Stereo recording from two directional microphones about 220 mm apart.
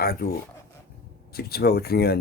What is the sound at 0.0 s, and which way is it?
Speech, 45° left (ahead or behind).